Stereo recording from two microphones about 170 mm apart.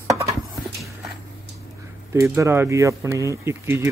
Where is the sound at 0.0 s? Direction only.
20° right (ahead or behind).